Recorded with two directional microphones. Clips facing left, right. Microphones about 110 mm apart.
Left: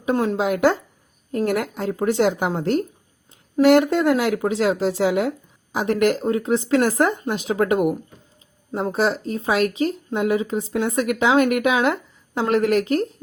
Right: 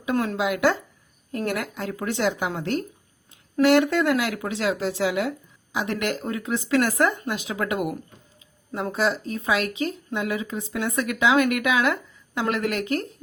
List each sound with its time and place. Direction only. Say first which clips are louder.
0.0 s speech: left 4 dB; 30° left (ahead or behind)